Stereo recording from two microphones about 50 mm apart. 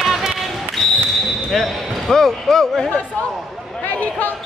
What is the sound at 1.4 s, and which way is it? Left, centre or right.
Speech, centre.